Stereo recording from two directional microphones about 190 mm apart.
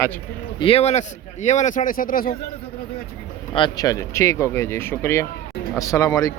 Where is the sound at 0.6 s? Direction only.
30° left (ahead or behind); by 2.3 s 45° left (ahead or behind).